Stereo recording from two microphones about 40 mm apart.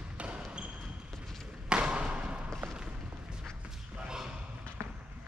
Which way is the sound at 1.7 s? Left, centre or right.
Right.